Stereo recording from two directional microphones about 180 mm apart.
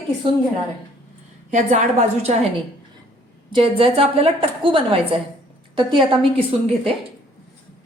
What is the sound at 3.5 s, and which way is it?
A woman's voice, 30° right (ahead or behind).